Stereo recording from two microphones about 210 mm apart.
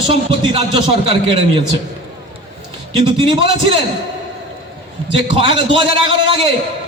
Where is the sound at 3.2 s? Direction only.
25° right (ahead or behind).